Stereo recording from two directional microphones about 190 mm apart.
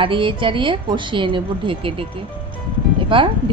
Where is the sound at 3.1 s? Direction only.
25° right (ahead or behind).